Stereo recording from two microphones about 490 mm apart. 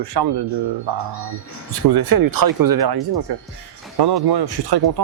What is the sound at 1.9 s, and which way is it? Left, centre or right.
Speech, right.